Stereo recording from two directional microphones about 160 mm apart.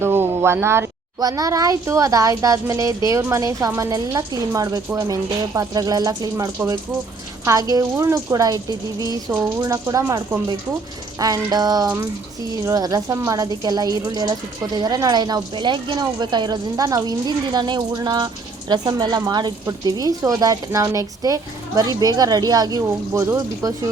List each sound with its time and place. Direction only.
0.0 s speech: 15° right (ahead or behind)